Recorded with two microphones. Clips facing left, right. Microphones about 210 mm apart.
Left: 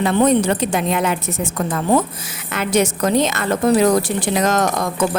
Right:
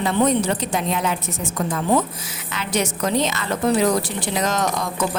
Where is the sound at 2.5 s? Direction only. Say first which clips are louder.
Left 6 dB; 50° left (ahead or behind).